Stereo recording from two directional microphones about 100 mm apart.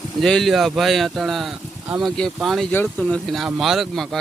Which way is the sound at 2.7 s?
20° left (ahead or behind).